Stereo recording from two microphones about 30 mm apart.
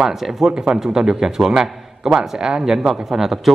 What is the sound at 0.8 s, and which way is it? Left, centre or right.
Speech, right.